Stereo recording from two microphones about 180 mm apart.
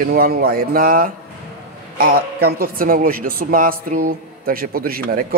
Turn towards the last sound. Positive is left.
turn(degrees=-55)  # may be behind; listen again after turning